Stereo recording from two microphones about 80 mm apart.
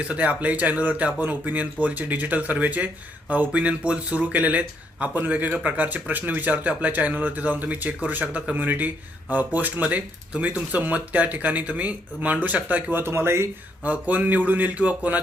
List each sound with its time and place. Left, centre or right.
0.1 s speech: centre
13.8 s speech: centre